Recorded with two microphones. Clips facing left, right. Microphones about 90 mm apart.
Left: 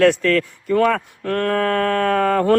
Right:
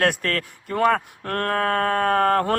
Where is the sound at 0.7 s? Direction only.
35° right (ahead or behind).